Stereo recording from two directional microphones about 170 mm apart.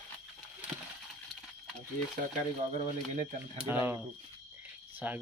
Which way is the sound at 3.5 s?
10° right (ahead or behind).